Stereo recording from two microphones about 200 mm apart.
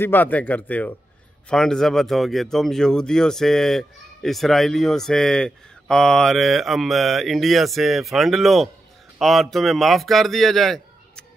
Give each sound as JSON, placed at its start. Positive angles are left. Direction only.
{"t": 0.0, "sound": "a man's voice", "side_deg": 10}